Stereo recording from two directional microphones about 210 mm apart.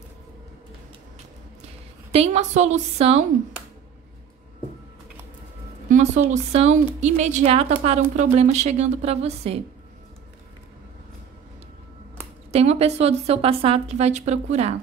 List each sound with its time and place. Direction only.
2.1 s a woman's voice: 30° right (ahead or behind)
5.9 s a woman's voice: 35° right (ahead or behind)
12.4 s a woman's voice: 30° right (ahead or behind)